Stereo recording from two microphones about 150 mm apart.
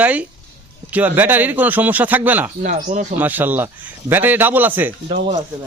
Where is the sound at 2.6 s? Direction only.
55° right (ahead or behind).